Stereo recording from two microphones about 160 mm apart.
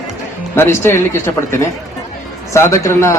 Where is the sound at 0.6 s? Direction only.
15° left (ahead or behind).